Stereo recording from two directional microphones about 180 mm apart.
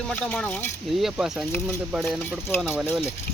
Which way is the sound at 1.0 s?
Centre (ahead or behind).